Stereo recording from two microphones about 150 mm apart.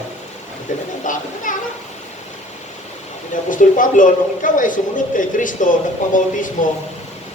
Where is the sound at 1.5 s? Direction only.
60° left (ahead or behind).